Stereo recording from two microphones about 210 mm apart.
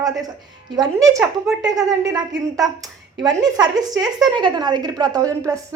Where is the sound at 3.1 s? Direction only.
20° right (ahead or behind).